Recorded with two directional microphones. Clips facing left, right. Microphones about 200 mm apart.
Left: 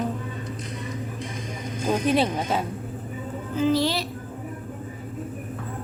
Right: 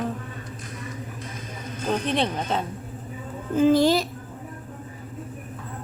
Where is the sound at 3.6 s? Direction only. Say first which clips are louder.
Right 5 dB; 50° right (ahead or behind).